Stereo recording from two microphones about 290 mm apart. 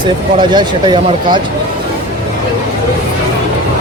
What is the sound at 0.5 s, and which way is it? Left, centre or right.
Speech, centre.